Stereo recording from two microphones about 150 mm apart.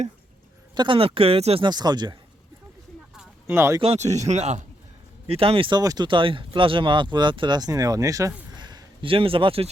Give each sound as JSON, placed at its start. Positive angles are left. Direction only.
{"t": 0.8, "sound": "speech", "side_deg": -35}
{"t": 3.4, "sound": "speech", "side_deg": -15}
{"t": 3.8, "sound": "speech", "side_deg": -45}
{"t": 8.5, "sound": "a sound", "side_deg": -30}